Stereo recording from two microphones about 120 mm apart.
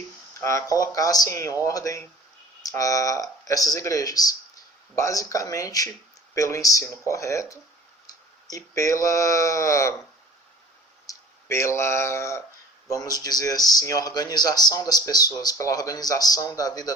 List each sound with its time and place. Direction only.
0.3 s speech: 25° left (ahead or behind)
11.0 s speech: 25° left (ahead or behind)